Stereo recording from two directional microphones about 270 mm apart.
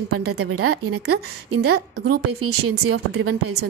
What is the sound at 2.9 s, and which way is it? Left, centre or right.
Speech, right.